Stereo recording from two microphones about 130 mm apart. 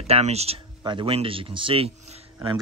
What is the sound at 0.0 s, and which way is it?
Speech, 55° right (ahead or behind).